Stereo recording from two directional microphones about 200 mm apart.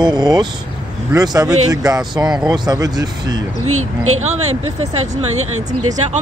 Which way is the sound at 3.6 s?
90° right.